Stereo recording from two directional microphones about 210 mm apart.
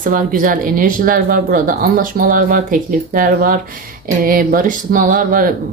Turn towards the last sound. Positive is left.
turn(degrees=-40)  # may be behind; listen again after turning